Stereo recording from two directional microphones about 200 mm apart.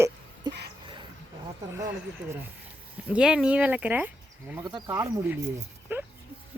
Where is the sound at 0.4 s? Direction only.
20° right (ahead or behind).